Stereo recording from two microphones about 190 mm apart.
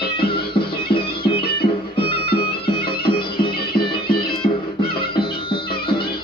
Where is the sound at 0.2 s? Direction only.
25° left (ahead or behind).